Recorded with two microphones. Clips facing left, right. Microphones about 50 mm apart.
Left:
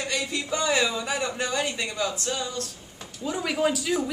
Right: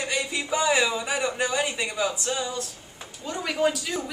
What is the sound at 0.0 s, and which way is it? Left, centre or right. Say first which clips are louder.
A man's voice: right 1 dB; centre.